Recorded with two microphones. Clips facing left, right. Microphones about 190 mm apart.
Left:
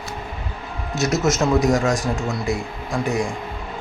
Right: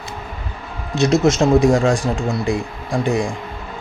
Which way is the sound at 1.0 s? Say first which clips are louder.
Right 5 dB; 30° right (ahead or behind).